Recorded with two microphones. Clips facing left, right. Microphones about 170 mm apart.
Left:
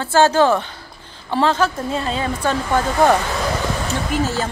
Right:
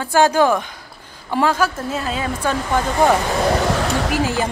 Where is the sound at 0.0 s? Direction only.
15° right (ahead or behind).